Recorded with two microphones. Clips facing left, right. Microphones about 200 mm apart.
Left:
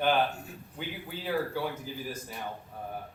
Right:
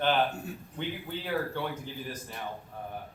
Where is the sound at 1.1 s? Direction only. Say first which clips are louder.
Left 3 dB; 5° left (ahead or behind).